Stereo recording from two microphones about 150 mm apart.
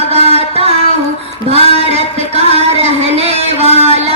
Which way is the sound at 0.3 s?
45° right (ahead or behind).